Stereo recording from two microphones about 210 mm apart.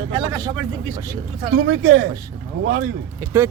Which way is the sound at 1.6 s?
65° right (ahead or behind).